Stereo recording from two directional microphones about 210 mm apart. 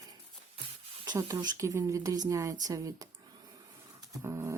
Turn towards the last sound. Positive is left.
turn(degrees=-10)  # may be behind; listen again after turning